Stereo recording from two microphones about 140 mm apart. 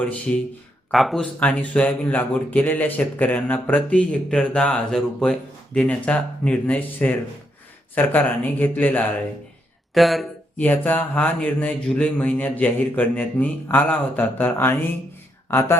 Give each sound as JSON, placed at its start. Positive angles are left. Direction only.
{"t": 0.9, "sound": "speech", "side_deg": 0}
{"t": 9.9, "sound": "speech", "side_deg": 0}
{"t": 10.6, "sound": "speech", "side_deg": 10}